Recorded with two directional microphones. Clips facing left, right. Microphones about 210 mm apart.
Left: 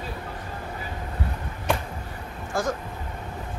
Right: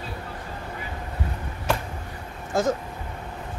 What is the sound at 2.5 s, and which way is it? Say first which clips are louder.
Speech: right 4 dB; 20° right (ahead or behind).